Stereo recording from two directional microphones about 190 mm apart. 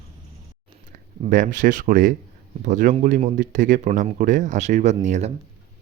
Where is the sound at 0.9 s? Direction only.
45° right (ahead or behind).